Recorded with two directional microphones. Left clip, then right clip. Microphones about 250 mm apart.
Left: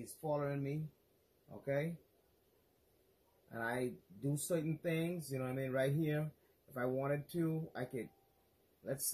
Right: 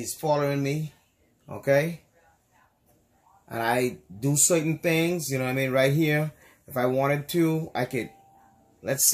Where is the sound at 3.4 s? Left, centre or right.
Centre.